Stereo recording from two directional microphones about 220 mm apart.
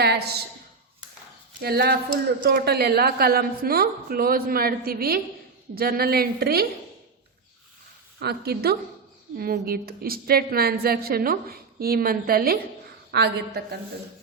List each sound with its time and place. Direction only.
0.0 s a sound: 50° right (ahead or behind)
1.6 s a woman's voice: 45° right (ahead or behind)
8.2 s a woman's voice: 45° right (ahead or behind)